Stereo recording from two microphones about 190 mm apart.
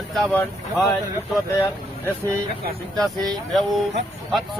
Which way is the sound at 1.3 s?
15° left (ahead or behind).